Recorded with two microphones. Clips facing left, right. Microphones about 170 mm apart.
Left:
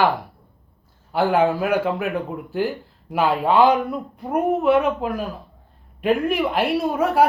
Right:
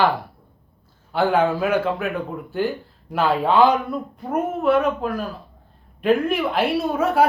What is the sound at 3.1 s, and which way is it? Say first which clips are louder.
Speech: even; 10° left (ahead or behind).